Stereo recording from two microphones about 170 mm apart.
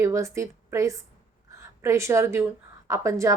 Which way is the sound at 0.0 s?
15° right (ahead or behind).